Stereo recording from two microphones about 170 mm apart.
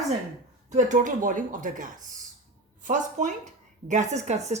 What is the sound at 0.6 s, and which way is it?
Speech, 45° right (ahead or behind).